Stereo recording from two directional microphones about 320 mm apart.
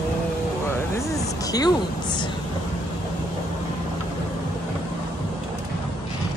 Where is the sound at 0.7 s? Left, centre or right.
Centre.